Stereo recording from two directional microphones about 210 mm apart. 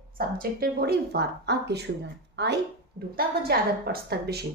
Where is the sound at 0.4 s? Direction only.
45° right (ahead or behind).